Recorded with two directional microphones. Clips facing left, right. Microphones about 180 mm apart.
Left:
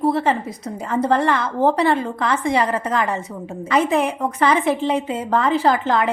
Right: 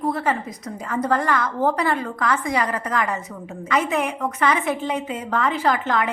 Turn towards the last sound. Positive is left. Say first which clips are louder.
# left 4 dB
turn(degrees=30)  # may be behind; listen again after turning